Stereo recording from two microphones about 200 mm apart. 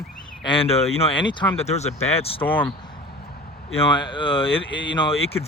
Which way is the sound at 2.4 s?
10° left (ahead or behind).